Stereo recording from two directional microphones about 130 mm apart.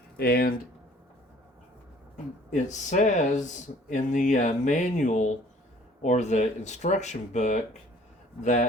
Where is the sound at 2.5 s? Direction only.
70° left (ahead or behind).